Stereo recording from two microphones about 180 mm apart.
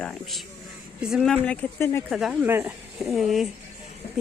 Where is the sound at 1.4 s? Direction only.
5° left (ahead or behind).